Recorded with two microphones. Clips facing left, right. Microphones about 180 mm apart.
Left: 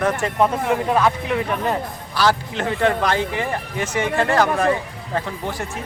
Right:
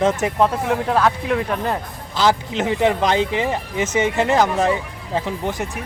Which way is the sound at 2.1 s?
20° right (ahead or behind).